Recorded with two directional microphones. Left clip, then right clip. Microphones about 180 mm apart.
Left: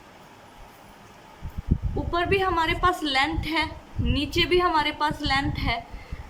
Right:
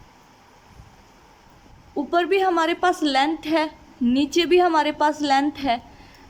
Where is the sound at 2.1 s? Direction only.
40° right (ahead or behind).